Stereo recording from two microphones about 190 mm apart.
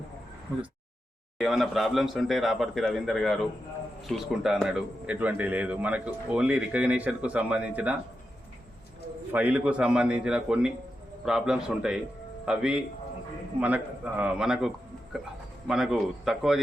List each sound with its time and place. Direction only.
1.4 s speech: centre (ahead or behind)
9.3 s speech: 10° right (ahead or behind)